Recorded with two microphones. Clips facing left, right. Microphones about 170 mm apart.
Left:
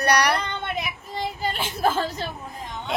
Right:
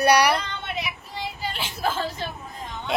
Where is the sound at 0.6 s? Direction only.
50° left (ahead or behind).